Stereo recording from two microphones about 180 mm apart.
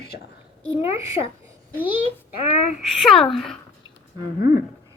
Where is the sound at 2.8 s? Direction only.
Centre (ahead or behind).